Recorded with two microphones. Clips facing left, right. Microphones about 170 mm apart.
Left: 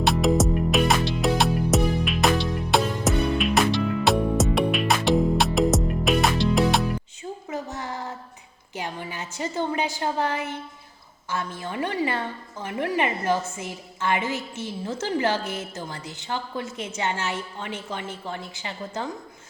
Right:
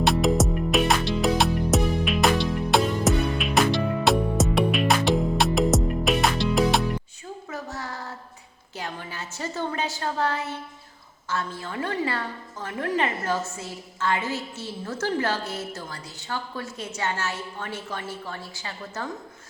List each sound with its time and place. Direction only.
0.0 s music: centre (ahead or behind)
7.5 s child singing: 20° left (ahead or behind)
8.7 s a sound: 15° left (ahead or behind)
11.3 s a woman's voice: 20° left (ahead or behind)